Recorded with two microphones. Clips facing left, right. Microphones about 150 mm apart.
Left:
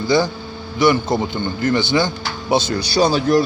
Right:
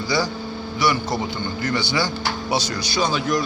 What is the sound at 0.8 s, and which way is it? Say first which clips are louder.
A man's voice: left 6 dB; 25° left (ahead or behind).